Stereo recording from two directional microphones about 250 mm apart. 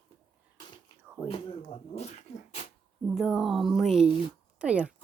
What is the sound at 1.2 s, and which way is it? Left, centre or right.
Speech, left.